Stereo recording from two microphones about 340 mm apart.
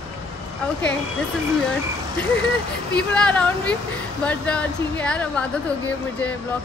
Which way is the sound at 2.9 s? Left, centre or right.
Centre.